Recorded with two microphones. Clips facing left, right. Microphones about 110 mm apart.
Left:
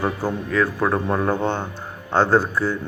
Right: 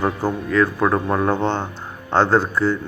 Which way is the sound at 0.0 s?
20° right (ahead or behind).